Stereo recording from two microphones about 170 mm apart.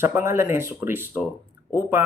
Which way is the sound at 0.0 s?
15° right (ahead or behind).